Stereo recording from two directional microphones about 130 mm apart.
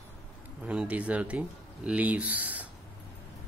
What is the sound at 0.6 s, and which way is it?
Speech, 10° right (ahead or behind).